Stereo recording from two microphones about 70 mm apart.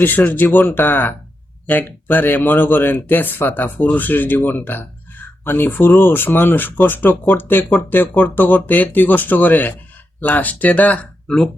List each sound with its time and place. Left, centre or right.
0.0 s a man's voice: left